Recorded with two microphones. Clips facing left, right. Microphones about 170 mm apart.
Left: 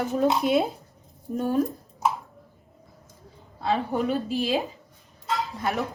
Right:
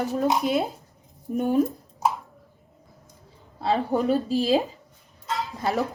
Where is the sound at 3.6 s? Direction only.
35° right (ahead or behind).